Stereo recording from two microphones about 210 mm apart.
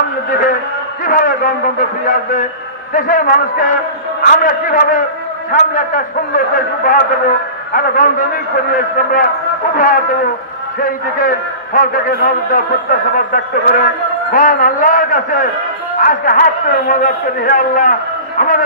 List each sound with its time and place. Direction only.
1.0 s a man's voice: 40° left (ahead or behind)